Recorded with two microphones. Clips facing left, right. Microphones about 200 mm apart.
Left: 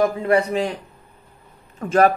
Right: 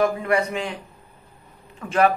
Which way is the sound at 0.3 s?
35° left (ahead or behind).